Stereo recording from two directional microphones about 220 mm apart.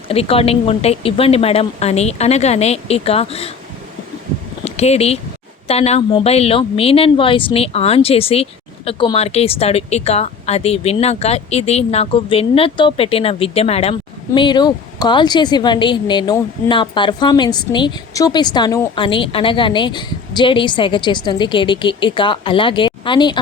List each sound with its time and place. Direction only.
0.1 s a woman's voice: 25° left (ahead or behind)
4.6 s a woman's voice: 30° left (ahead or behind)